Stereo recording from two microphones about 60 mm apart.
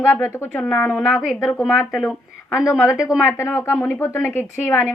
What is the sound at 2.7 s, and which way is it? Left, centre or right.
Speech, left.